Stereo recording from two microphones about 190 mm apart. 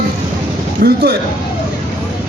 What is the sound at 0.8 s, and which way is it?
Speech, 60° right (ahead or behind).